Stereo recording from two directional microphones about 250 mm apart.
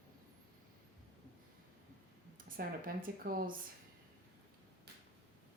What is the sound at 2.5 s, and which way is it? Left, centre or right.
Speech, right.